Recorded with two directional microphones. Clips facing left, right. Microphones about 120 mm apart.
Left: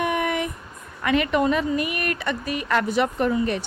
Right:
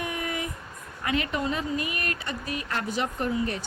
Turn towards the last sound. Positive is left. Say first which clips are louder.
# left 6 dB
turn(degrees=70)  # may be behind; listen again after turning